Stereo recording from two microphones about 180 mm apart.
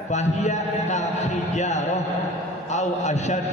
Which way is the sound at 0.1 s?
40° left (ahead or behind).